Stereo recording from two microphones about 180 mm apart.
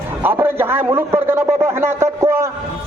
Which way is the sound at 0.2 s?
10° right (ahead or behind).